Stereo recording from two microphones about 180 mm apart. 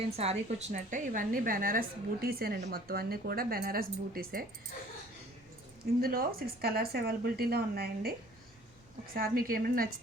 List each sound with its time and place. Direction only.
0.2 s a woman's voice: 35° right (ahead or behind); by 4.4 s 55° right (ahead or behind)
5.8 s speech: 55° right (ahead or behind)
9.1 s a woman's voice: 55° right (ahead or behind)